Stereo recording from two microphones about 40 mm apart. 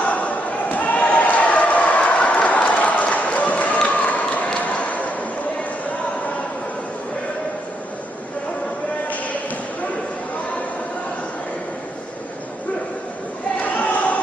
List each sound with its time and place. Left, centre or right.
0.0 s basketball bounce: left
4.7 s a sound: left
13.6 s crowd: left